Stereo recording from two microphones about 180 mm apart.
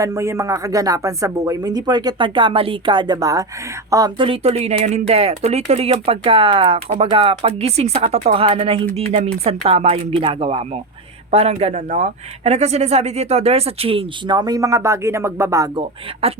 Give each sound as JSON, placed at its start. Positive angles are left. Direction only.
{"t": 0.0, "sound": "speech", "side_deg": -15}
{"t": 16.2, "sound": "speech", "side_deg": -35}